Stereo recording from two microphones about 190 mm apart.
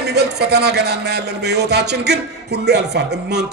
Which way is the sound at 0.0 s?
60° right (ahead or behind).